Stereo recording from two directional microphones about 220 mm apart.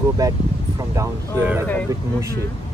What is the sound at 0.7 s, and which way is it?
Speech, 10° right (ahead or behind).